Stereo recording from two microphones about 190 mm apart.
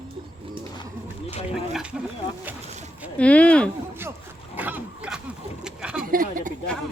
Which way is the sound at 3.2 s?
5° left (ahead or behind).